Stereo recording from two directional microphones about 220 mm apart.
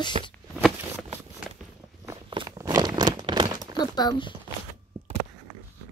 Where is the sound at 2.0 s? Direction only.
20° right (ahead or behind).